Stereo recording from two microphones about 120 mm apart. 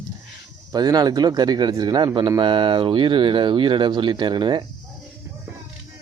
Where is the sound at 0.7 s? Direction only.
35° right (ahead or behind).